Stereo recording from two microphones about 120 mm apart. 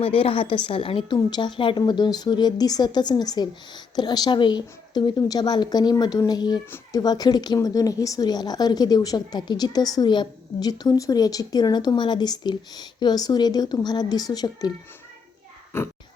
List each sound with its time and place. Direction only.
0.0 s a woman's voice: 50° left (ahead or behind); by 14.7 s 30° left (ahead or behind)
15.7 s a child's voice: 20° left (ahead or behind)